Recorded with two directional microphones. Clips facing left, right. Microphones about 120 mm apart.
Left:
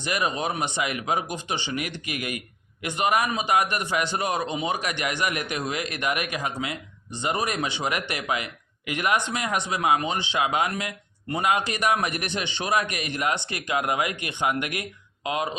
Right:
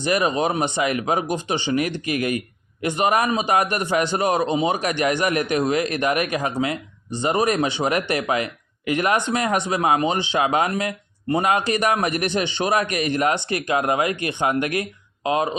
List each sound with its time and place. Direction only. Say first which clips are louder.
0.0 s speech: right 6 dB; 35° right (ahead or behind)
4.8 s a man's voice: right 6 dB; 40° right (ahead or behind)